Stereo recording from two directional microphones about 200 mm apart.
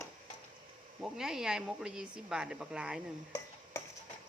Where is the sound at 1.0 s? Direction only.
Centre (ahead or behind).